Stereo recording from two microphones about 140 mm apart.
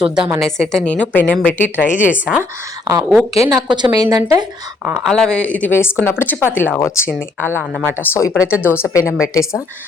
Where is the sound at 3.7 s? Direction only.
30° right (ahead or behind).